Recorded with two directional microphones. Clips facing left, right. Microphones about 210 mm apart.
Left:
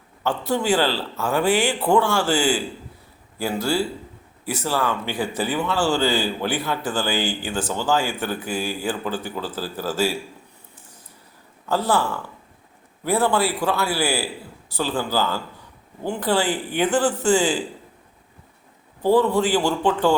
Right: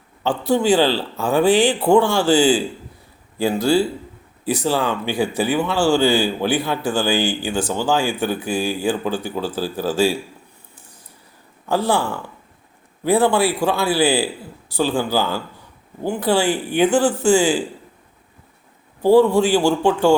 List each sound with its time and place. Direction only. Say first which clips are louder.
0.3 s speech: right 5 dB; 15° right (ahead or behind)
11.7 s speech: right 2 dB; 15° right (ahead or behind)
13.1 s speech: right 4 dB; 15° right (ahead or behind)
19.0 s speech: right 5 dB; 10° right (ahead or behind)